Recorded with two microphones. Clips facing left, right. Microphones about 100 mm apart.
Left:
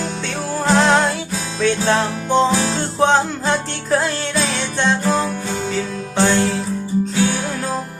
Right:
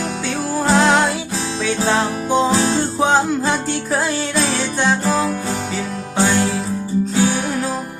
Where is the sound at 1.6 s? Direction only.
5° right (ahead or behind).